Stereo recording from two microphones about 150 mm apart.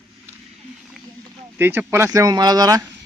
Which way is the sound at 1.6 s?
15° right (ahead or behind).